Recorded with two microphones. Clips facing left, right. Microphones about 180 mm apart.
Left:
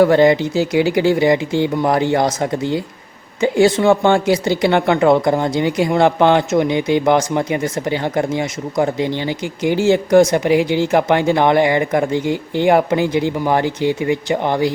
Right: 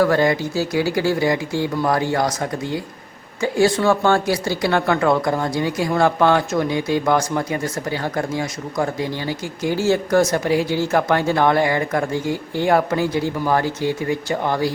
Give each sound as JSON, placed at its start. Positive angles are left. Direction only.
{"t": 0.0, "sound": "speech", "side_deg": 20}